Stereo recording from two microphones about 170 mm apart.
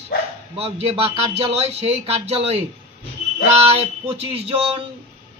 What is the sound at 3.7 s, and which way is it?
Speech, 35° right (ahead or behind).